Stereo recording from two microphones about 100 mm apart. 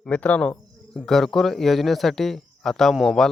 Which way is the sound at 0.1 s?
15° left (ahead or behind).